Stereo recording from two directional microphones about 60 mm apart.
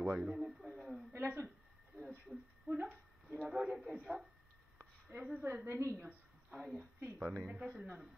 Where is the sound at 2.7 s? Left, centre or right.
Right.